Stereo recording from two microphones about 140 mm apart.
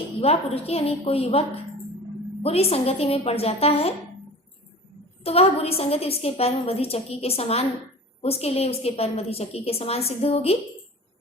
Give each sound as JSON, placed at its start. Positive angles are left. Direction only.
{"t": 0.2, "sound": "a woman's voice", "side_deg": 45}
{"t": 5.2, "sound": "a woman's voice", "side_deg": 45}